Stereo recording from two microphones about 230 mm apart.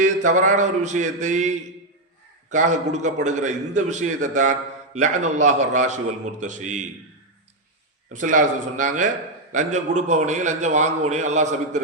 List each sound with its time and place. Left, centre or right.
0.0 s a man's voice: right
8.1 s a man's voice: right